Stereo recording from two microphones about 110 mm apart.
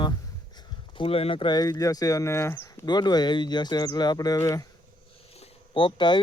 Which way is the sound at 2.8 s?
40° left (ahead or behind).